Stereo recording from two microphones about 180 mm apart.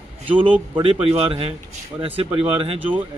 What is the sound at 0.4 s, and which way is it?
Speech, 30° right (ahead or behind).